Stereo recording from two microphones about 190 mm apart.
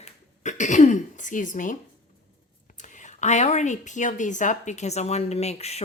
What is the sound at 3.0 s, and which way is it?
A woman's voice, 40° left (ahead or behind).